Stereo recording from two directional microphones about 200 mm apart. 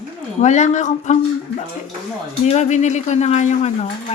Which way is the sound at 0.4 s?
35° left (ahead or behind).